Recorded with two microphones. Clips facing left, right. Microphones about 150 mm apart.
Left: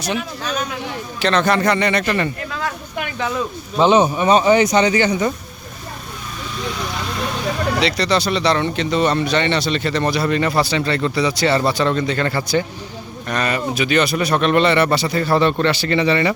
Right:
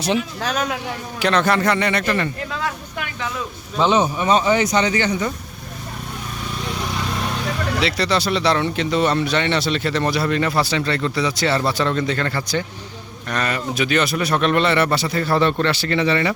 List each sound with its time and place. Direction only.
0.4 s speech: 90° right
1.2 s speech: 5° right (ahead or behind)
3.8 s speech: 15° left (ahead or behind)
7.8 s speech: 5° right (ahead or behind)